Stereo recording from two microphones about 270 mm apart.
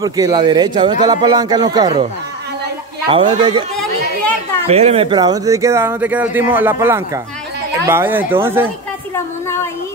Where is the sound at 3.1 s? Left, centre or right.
Centre.